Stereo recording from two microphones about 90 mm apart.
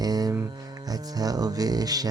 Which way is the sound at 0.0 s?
45° right (ahead or behind).